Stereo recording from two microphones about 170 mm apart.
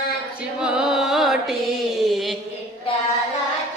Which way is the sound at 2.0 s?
Centre (ahead or behind).